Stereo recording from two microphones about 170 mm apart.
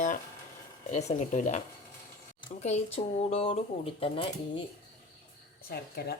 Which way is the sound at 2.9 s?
35° left (ahead or behind).